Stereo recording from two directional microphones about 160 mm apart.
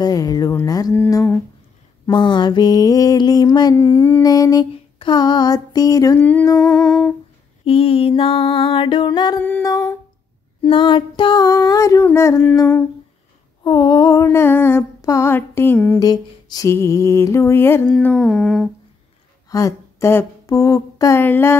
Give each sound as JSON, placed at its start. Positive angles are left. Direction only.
{"t": 0.0, "sound": "mantra", "side_deg": 25}
{"t": 1.0, "sound": "female singing", "side_deg": 15}
{"t": 2.0, "sound": "mantra", "side_deg": 30}
{"t": 6.2, "sound": "female singing", "side_deg": 10}
{"t": 6.6, "sound": "humming", "side_deg": 5}
{"t": 7.6, "sound": "music", "side_deg": 35}
{"t": 9.4, "sound": "female singing", "side_deg": 15}
{"t": 10.6, "sound": "mantra", "side_deg": 30}
{"t": 13.7, "sound": "female singing", "side_deg": 25}
{"t": 16.1, "sound": "female singing", "side_deg": 25}
{"t": 18.1, "sound": "humming", "side_deg": 0}
{"t": 19.5, "sound": "a sound", "side_deg": 20}